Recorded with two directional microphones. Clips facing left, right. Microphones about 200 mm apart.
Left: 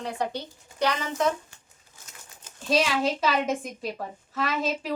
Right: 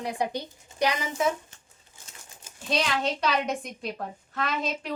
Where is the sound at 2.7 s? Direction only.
5° left (ahead or behind).